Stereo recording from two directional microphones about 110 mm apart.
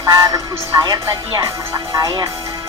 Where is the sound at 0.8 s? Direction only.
30° right (ahead or behind).